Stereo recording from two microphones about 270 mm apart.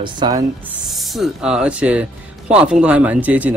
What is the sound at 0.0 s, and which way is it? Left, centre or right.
Speech, centre.